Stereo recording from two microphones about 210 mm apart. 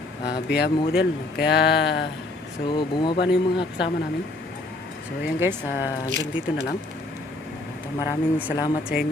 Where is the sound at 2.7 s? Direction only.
20° left (ahead or behind).